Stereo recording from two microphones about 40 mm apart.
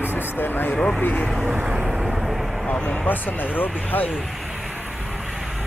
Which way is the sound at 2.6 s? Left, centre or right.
Left.